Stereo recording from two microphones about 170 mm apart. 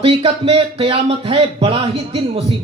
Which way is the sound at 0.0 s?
35° right (ahead or behind).